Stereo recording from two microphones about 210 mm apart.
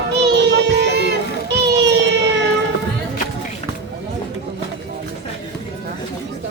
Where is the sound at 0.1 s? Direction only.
55° right (ahead or behind).